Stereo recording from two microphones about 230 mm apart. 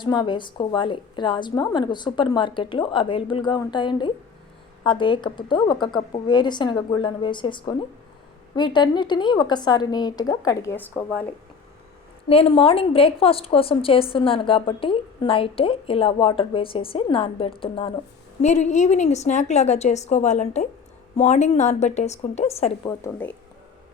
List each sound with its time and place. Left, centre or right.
0.0 s a woman's voice: centre
12.3 s a woman's voice: left
23.0 s a woman's voice: centre